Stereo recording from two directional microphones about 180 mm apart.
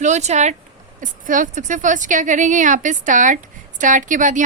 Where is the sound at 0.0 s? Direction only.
40° right (ahead or behind).